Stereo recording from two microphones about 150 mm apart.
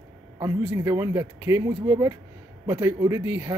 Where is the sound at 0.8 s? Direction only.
20° right (ahead or behind).